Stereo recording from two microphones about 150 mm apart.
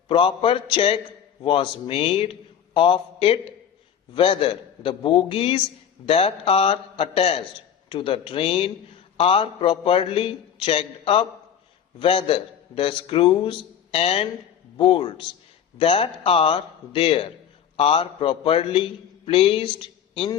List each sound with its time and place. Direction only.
0.1 s a man's voice: 35° left (ahead or behind)